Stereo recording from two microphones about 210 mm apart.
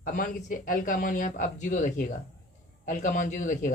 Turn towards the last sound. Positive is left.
turn(degrees=35)  # may be behind; listen again after turning